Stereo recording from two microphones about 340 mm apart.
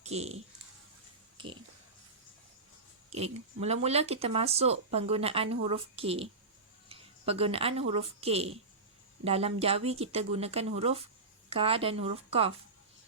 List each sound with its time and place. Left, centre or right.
0.0 s speech: centre
3.1 s speech: centre